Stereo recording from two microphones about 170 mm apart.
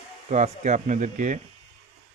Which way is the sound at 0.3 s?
40° right (ahead or behind).